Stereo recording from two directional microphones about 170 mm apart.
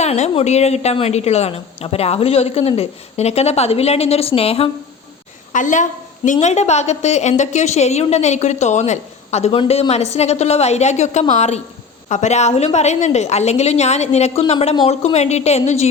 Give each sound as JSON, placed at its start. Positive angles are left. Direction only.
{"t": 0.0, "sound": "a woman's voice", "side_deg": 40}
{"t": 5.5, "sound": "a woman's voice", "side_deg": 45}